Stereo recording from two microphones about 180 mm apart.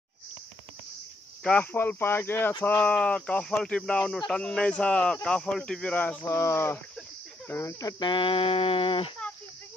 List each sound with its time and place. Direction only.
1.4 s speech: 5° left (ahead or behind); by 9.1 s 30° left (ahead or behind)